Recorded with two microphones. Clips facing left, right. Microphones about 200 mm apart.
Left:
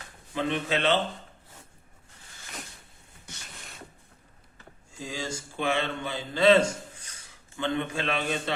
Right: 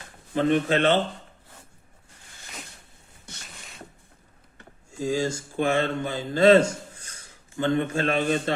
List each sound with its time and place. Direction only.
0.3 s speech: 50° right (ahead or behind)
4.9 s speech: 45° right (ahead or behind)